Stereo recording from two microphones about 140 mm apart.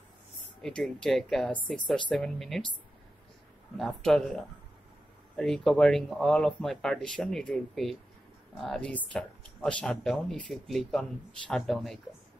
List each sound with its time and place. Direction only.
0.6 s speech: centre (ahead or behind)
3.7 s speech: centre (ahead or behind)
5.3 s speech: 5° left (ahead or behind)